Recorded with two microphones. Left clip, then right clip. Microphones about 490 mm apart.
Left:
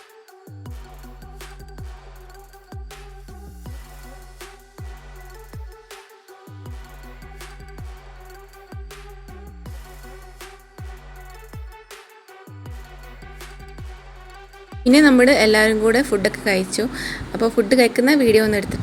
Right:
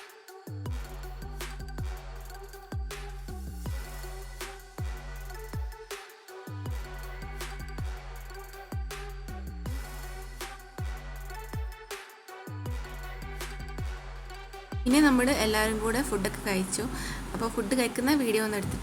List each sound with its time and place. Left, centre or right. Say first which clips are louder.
7.3 s music: left 1 dB; centre
14.8 s a woman's voice: left 11 dB; right